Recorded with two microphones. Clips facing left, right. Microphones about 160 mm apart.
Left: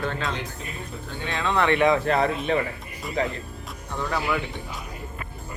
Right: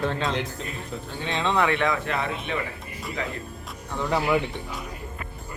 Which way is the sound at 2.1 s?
40° left (ahead or behind).